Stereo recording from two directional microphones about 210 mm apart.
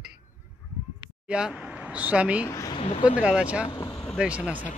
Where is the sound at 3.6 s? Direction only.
20° left (ahead or behind).